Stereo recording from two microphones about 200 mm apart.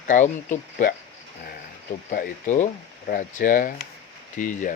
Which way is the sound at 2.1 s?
45° left (ahead or behind).